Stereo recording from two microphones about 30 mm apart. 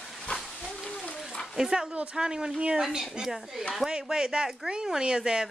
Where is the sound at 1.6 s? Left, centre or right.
Right.